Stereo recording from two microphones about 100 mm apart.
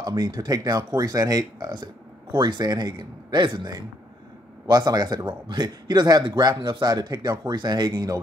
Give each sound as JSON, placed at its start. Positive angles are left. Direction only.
{"t": 0.0, "sound": "a man's voice", "side_deg": -40}